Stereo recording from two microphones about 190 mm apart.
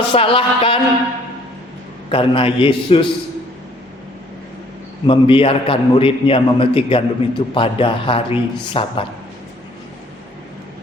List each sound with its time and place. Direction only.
0.1 s a man's voice: 30° left (ahead or behind)
2.0 s a man's voice: 30° left (ahead or behind)
5.0 s a man's voice: 30° left (ahead or behind)